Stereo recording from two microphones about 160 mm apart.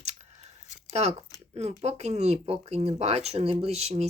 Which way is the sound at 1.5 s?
40° right (ahead or behind).